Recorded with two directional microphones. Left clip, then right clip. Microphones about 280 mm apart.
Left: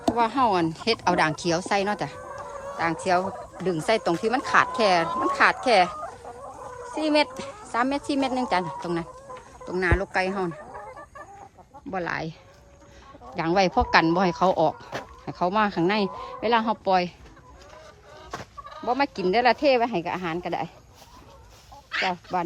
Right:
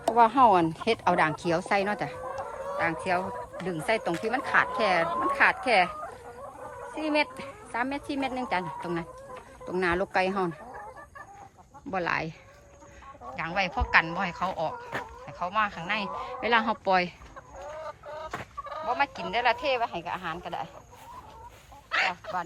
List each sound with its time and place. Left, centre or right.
0.2 s speech: centre
11.9 s speech: centre
13.3 s speech: centre
18.9 s speech: centre
21.8 s a sound: centre